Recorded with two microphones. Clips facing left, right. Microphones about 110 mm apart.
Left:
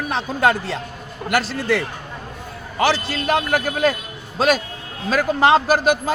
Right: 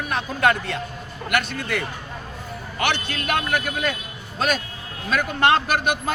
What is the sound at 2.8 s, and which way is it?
Speech, 30° left (ahead or behind).